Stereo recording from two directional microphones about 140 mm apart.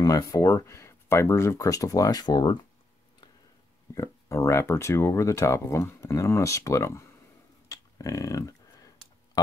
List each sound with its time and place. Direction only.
0.0 s speech: 25° left (ahead or behind)
3.9 s speech: 20° left (ahead or behind)
7.6 s a sound: 25° left (ahead or behind)